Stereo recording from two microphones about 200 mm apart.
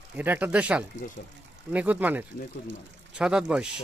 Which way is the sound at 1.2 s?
45° left (ahead or behind).